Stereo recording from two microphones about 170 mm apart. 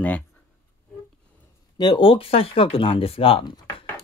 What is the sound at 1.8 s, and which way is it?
Speech, 30° left (ahead or behind).